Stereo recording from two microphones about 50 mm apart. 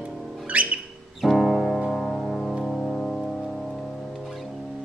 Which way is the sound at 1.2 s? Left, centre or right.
Centre.